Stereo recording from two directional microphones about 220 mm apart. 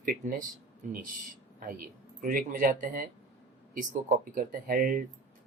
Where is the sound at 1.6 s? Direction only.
40° right (ahead or behind).